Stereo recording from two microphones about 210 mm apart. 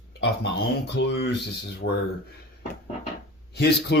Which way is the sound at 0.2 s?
55° left (ahead or behind).